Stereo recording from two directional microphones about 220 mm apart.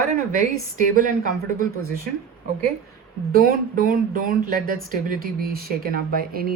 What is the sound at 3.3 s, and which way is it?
Speech, 40° right (ahead or behind).